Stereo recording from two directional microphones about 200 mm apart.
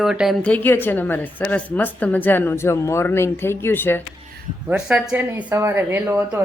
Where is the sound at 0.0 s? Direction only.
Centre (ahead or behind).